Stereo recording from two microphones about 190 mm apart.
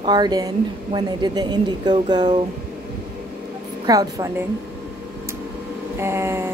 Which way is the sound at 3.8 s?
20° right (ahead or behind).